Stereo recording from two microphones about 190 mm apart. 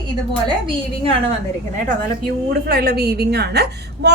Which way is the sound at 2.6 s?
55° right (ahead or behind).